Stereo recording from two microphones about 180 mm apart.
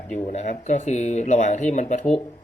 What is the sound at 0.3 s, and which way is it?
Speech, 40° left (ahead or behind).